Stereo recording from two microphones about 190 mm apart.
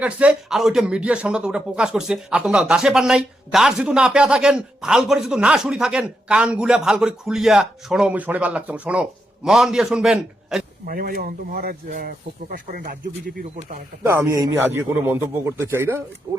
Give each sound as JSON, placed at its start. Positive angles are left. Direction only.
{"t": 0.0, "sound": "speech", "side_deg": -5}
{"t": 10.8, "sound": "speech", "side_deg": -50}
{"t": 14.0, "sound": "a man's voice", "side_deg": -15}